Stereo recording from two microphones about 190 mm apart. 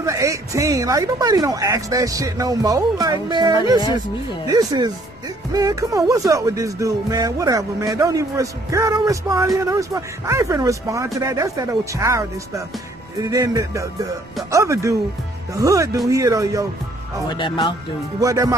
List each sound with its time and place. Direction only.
0.0 s speech: 15° right (ahead or behind)
17.3 s speech: 25° left (ahead or behind)
18.2 s speech: 15° right (ahead or behind)